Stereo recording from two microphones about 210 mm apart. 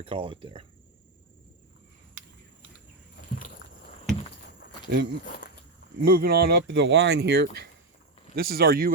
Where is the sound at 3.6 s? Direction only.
60° left (ahead or behind).